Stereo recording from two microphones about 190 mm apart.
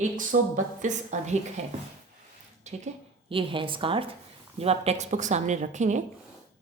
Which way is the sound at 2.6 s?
35° right (ahead or behind).